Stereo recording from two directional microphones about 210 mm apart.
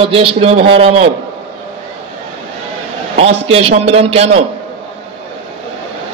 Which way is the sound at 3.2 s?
30° right (ahead or behind).